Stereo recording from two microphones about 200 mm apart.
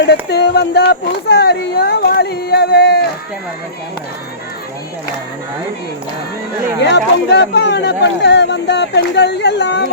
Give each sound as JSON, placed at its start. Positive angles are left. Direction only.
{"t": 0.0, "sound": "speech", "side_deg": 55}
{"t": 6.7, "sound": "speech", "side_deg": 60}